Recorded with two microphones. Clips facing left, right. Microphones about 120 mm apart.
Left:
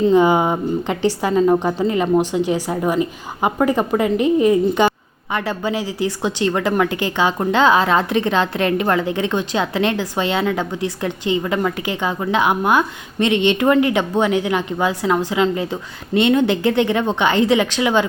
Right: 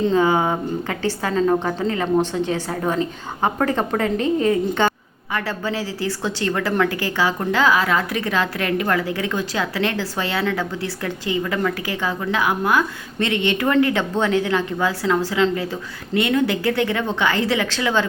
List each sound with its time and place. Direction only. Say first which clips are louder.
0.1 s a woman's voice: left 4 dB; 15° left (ahead or behind)